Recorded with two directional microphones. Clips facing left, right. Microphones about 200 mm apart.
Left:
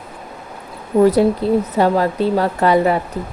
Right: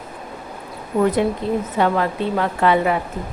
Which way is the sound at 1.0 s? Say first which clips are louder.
Left 5 dB; 35° left (ahead or behind).